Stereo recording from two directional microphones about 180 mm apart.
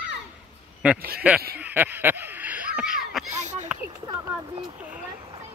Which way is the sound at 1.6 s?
10° right (ahead or behind).